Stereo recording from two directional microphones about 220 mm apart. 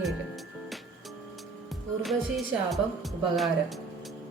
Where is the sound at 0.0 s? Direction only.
Centre (ahead or behind).